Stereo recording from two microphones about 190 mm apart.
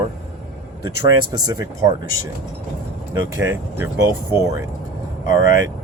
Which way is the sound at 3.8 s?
15° right (ahead or behind).